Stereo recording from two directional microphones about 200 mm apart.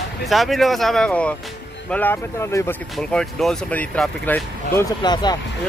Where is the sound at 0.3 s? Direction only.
Centre (ahead or behind).